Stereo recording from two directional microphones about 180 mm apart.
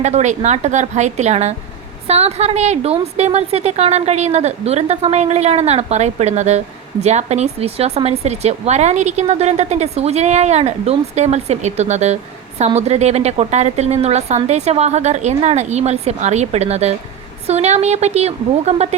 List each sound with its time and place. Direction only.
0.0 s speech: 40° right (ahead or behind)